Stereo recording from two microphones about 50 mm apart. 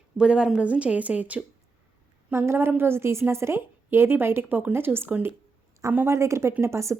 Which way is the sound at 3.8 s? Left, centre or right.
Right.